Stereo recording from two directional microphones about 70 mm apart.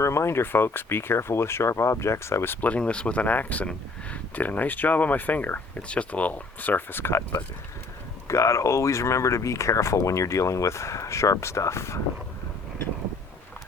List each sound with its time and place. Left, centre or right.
0.0 s speech: left
2.6 s speech: centre; by 11.9 s left